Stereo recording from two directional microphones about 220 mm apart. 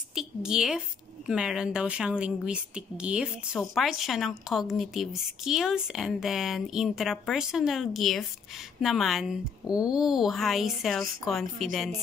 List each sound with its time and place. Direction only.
0.1 s a woman's voice: 5° right (ahead or behind)